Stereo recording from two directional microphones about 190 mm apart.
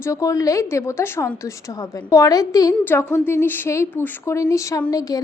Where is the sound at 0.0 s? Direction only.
15° left (ahead or behind).